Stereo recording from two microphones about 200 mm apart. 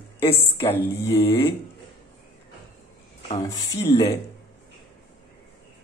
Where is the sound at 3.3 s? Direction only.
20° left (ahead or behind).